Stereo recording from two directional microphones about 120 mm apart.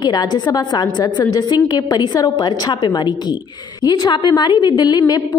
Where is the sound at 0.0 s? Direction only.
35° left (ahead or behind).